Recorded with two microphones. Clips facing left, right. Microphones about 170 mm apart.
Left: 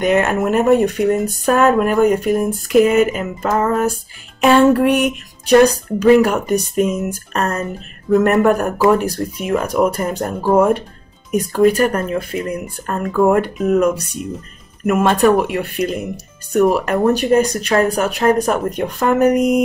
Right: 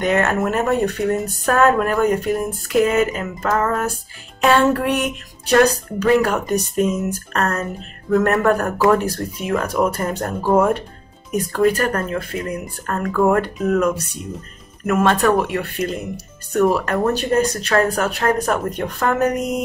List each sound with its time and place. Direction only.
0.0 s speech: 15° left (ahead or behind)